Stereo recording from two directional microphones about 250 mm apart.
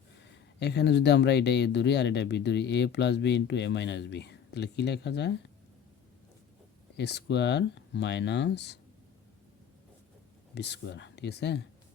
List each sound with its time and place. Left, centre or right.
0.2 s speech: left
6.9 s speech: left
10.5 s speech: left